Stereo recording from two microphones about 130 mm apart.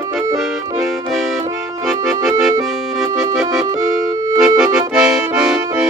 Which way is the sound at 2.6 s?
Centre (ahead or behind).